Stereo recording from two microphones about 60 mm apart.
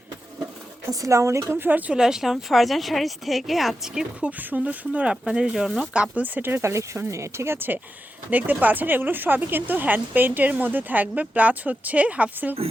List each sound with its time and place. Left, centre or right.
0.9 s speech: right
1.5 s speech: right
1.9 s speech: centre
4.2 s speech: right
5.6 s speech: centre
5.9 s speech: right
6.6 s speech: right
8.3 s speech: right